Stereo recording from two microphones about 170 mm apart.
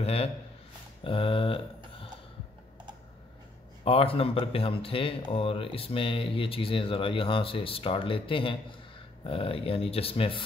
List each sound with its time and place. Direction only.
0.0 s speech: 35° left (ahead or behind)
3.8 s speech: 35° left (ahead or behind)